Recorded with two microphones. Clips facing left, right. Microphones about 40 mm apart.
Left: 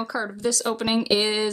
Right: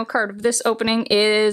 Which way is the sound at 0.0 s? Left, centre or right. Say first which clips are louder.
Right 6 dB; right.